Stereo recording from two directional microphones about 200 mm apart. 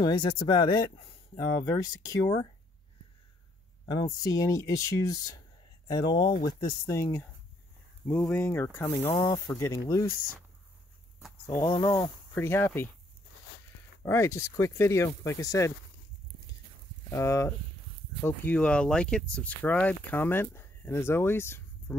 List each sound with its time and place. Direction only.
0.0 s speech: 25° left (ahead or behind)
3.8 s speech: 20° left (ahead or behind)
11.4 s speech: 15° left (ahead or behind)
14.0 s speech: 15° left (ahead or behind)
17.1 s speech: 15° left (ahead or behind)